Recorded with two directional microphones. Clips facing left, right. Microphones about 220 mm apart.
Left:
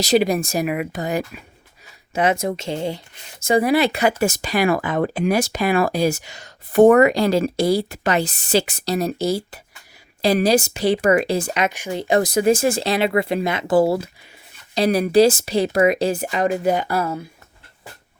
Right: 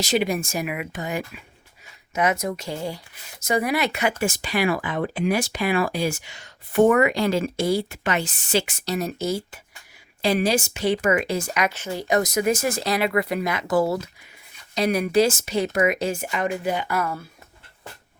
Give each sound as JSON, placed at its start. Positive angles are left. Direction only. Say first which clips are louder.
{"t": 0.0, "sound": "speech", "louder": "left 5 dB", "side_deg": 35}
{"t": 11.7, "sound": "speech", "louder": "left 3 dB", "side_deg": 15}
{"t": 12.0, "sound": "speech", "louder": "left 5 dB", "side_deg": 30}